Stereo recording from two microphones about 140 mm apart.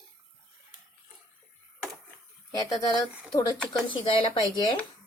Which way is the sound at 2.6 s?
25° left (ahead or behind).